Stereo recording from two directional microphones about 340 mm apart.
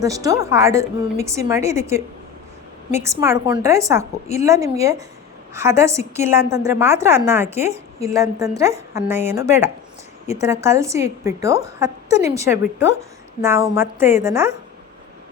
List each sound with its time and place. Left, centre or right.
0.0 s a woman's voice: centre
3.0 s a woman's voice: centre
7.7 s a woman's voice: centre
8.1 s a woman's voice: centre